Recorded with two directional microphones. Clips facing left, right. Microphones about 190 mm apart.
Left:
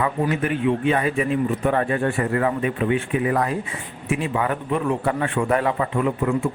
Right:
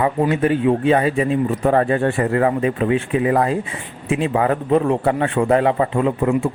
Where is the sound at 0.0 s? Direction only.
30° right (ahead or behind).